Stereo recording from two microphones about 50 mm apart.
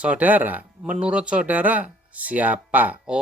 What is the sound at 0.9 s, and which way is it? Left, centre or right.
Speech, right.